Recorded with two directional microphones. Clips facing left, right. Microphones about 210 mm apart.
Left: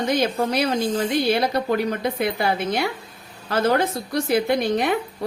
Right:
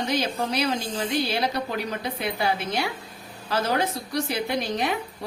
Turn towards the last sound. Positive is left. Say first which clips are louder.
# left 6 dB
turn(degrees=55)  # may be behind; listen again after turning